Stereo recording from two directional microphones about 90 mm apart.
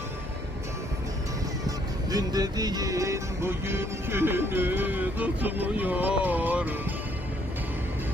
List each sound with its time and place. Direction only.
1.6 s music: 45° right (ahead or behind); by 6.7 s 20° right (ahead or behind)